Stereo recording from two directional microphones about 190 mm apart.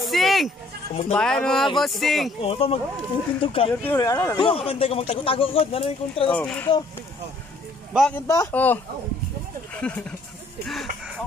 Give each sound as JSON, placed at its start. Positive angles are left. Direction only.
{"t": 0.0, "sound": "bleat", "side_deg": 0}
{"t": 1.1, "sound": "speech", "side_deg": 5}
{"t": 2.4, "sound": "speech", "side_deg": 30}
{"t": 3.8, "sound": "speech", "side_deg": 15}
{"t": 6.3, "sound": "speech", "side_deg": 5}
{"t": 7.9, "sound": "speech", "side_deg": -5}
{"t": 8.3, "sound": "speech", "side_deg": 15}
{"t": 9.8, "sound": "speech", "side_deg": 5}